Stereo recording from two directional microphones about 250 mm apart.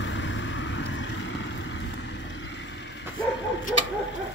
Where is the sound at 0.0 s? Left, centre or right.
Left.